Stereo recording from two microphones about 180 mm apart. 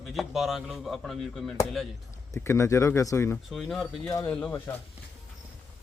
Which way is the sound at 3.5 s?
Centre (ahead or behind).